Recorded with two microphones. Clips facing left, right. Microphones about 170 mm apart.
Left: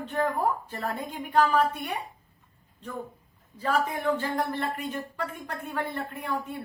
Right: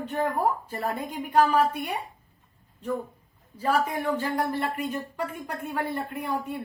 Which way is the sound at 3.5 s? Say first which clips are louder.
Right 2 dB; 10° right (ahead or behind).